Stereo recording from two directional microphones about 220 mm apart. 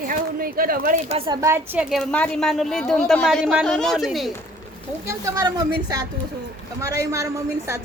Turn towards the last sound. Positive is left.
turn(degrees=-10)  # may be behind; listen again after turning